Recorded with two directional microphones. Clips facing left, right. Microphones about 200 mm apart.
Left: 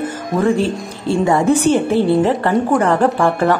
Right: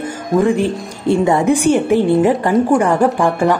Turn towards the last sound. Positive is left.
turn(degrees=-15)  # may be behind; listen again after turning